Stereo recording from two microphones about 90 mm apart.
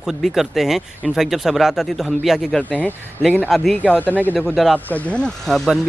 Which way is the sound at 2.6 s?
15° left (ahead or behind).